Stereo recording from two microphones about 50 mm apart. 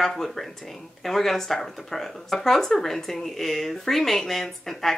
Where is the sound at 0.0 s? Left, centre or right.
Centre.